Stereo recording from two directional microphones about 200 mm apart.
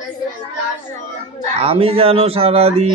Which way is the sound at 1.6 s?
30° right (ahead or behind).